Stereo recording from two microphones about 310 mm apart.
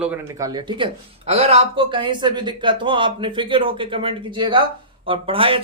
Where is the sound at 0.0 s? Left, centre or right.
Centre.